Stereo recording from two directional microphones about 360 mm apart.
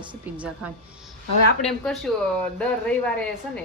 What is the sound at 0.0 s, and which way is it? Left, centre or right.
Speech, centre.